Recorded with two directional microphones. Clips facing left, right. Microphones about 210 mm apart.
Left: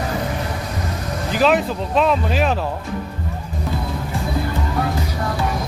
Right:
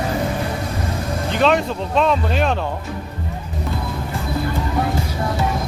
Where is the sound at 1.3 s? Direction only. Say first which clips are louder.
Left 1 dB; 5° left (ahead or behind).